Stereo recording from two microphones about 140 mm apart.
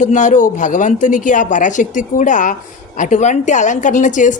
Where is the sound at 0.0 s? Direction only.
60° left (ahead or behind).